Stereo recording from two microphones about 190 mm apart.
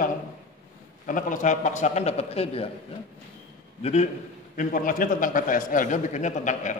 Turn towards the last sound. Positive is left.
turn(degrees=40)  # may be behind; listen again after turning